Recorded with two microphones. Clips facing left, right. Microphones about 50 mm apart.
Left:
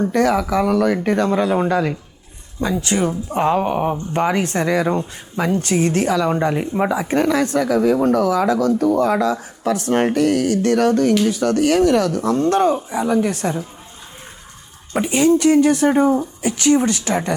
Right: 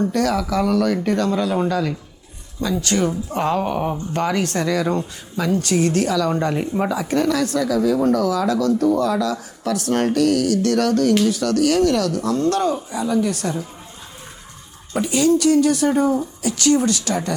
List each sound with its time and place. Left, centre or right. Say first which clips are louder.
0.0 s speech: left 3 dB; left
14.9 s speech: left 2 dB; left